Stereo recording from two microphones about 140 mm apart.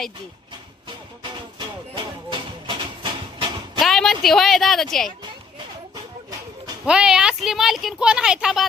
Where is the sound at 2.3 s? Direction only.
35° right (ahead or behind).